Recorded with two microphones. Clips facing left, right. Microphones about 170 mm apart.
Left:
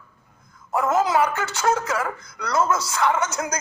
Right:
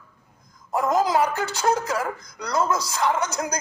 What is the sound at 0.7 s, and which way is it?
Speech, 35° right (ahead or behind).